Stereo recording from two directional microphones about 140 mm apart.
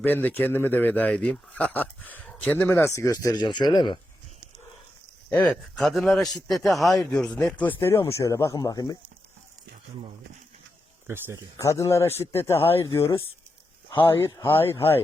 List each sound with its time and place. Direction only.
0.0 s speech: 15° left (ahead or behind); by 4.0 s 35° left (ahead or behind)
5.3 s speech: 5° left (ahead or behind)
7.6 s speech: 15° left (ahead or behind)
11.0 s speech: 15° right (ahead or behind)
11.5 s speech: 20° left (ahead or behind)
13.1 s speech: 40° left (ahead or behind)
14.3 s speech: 20° left (ahead or behind)